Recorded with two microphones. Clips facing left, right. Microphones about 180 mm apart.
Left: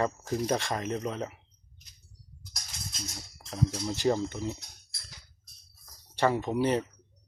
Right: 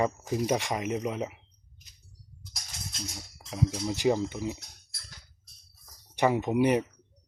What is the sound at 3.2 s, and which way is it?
Speech, 10° right (ahead or behind).